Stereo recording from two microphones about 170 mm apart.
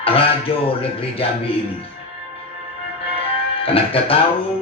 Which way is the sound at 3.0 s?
35° left (ahead or behind).